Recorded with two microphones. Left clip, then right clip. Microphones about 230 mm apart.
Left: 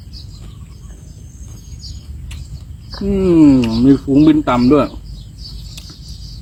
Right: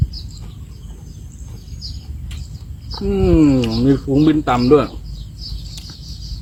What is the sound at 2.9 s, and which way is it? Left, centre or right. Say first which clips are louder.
Speech: left 2 dB; centre.